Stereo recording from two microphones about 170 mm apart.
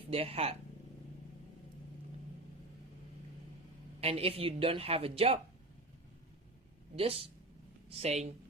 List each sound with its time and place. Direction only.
0.1 s speech: 35° right (ahead or behind)
4.0 s speech: 35° right (ahead or behind)
6.9 s speech: 35° right (ahead or behind)